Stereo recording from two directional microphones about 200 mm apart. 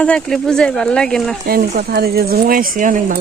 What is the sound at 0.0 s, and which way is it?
Speech, 5° left (ahead or behind).